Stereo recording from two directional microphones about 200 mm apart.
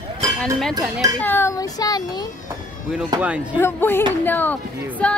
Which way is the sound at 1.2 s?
10° left (ahead or behind).